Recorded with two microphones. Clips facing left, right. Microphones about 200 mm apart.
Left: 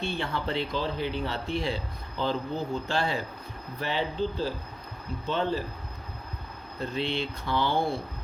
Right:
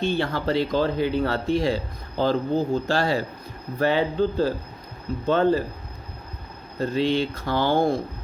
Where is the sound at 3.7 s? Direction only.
50° right (ahead or behind).